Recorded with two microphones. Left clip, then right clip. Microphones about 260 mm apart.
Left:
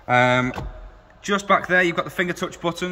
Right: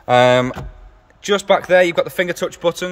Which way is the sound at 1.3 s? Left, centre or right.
Centre.